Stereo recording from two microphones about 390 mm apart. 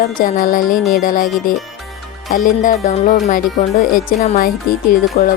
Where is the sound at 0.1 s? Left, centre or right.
Centre.